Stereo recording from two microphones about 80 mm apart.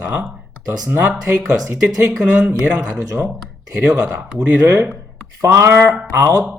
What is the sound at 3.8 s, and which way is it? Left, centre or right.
Speech, centre.